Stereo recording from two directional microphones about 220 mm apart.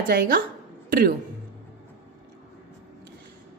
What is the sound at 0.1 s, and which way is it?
Speech, 40° right (ahead or behind).